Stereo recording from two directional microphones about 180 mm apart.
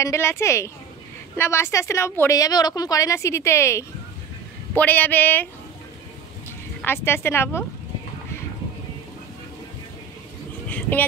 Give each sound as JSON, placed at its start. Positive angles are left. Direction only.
{"t": 0.0, "sound": "a woman's voice", "side_deg": 15}
{"t": 6.8, "sound": "a woman's voice", "side_deg": 15}
{"t": 10.7, "sound": "vehicle", "side_deg": 10}